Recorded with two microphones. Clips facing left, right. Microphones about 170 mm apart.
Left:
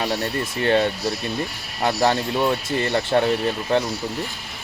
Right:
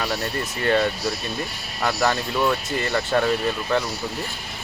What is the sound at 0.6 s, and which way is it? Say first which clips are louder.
Speech: left 1 dB; 20° left (ahead or behind).